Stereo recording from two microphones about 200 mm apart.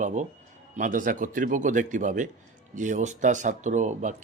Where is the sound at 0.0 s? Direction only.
35° right (ahead or behind).